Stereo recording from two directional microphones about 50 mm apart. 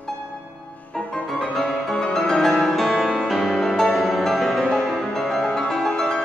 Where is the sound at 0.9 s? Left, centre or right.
Left.